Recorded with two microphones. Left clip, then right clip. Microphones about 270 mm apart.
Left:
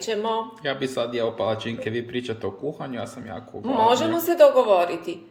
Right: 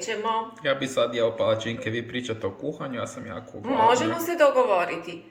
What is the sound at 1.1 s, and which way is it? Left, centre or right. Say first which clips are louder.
Speech: right 1 dB; left.